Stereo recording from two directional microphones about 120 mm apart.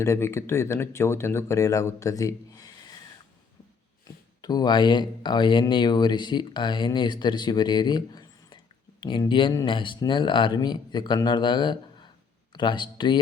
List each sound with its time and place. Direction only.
0.0 s speech: 25° left (ahead or behind)
4.4 s speech: 35° left (ahead or behind)